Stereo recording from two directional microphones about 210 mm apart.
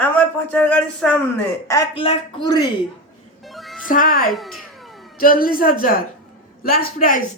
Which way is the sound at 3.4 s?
Centre (ahead or behind).